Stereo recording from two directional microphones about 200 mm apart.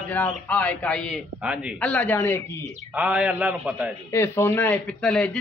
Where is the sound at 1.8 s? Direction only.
5° left (ahead or behind).